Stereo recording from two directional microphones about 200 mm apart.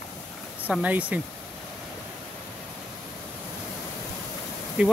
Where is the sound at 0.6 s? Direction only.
5° right (ahead or behind).